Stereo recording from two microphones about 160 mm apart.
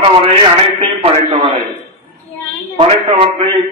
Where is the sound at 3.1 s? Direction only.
40° right (ahead or behind).